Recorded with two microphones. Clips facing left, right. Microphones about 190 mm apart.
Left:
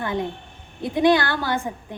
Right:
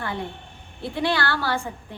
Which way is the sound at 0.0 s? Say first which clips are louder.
Left 5 dB; 20° left (ahead or behind).